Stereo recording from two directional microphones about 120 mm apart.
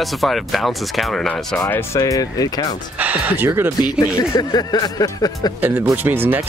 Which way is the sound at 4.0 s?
35° left (ahead or behind).